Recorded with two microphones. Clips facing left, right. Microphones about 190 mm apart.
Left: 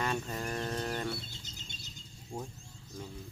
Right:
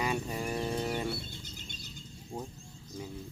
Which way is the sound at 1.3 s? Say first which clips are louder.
Right 4 dB; 55° right (ahead or behind).